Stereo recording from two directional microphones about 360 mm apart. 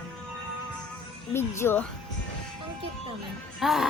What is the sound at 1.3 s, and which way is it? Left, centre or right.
Speech, centre.